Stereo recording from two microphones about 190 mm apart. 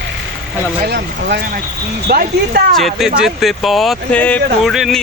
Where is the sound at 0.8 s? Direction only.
60° right (ahead or behind).